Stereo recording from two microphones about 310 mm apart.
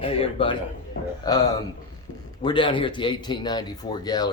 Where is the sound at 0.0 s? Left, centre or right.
Centre.